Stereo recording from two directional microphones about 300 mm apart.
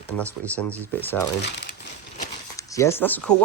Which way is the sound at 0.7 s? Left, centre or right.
Centre.